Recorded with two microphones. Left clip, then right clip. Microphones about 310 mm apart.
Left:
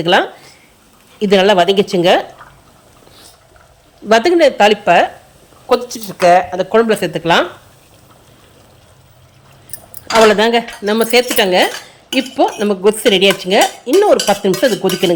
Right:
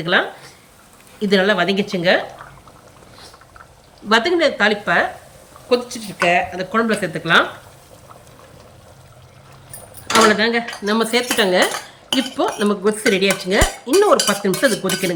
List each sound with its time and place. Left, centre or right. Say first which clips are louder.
0.0 s dishes: left 5 dB; centre
4.1 s dishes: left 6 dB; centre
6.1 s speech: left 7 dB; left
6.5 s dishes: left 7 dB; centre
10.2 s dishes: left 5 dB; centre